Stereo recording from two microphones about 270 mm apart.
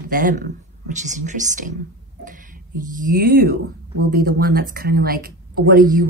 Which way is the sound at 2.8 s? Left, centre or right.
Right.